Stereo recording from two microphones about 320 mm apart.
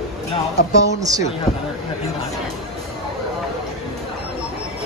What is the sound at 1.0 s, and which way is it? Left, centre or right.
Speech, centre.